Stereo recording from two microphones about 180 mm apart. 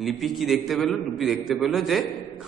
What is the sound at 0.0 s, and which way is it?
A man's voice, centre (ahead or behind).